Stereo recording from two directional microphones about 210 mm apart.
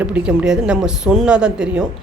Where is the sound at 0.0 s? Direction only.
5° right (ahead or behind).